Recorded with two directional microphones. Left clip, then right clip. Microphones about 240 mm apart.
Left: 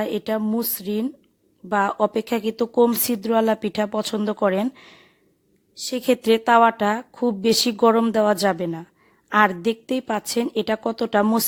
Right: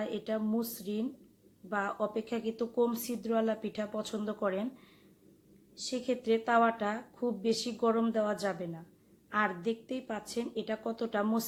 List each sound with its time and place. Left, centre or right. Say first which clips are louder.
0.0 s speech: left 11 dB; left